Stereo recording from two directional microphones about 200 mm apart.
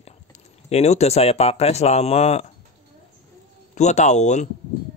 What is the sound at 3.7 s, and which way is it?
Speech, 35° left (ahead or behind).